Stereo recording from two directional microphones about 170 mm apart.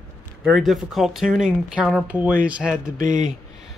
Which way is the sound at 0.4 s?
Centre (ahead or behind).